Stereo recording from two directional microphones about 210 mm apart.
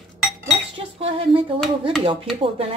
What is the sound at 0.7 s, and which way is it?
Cutlery, 25° right (ahead or behind).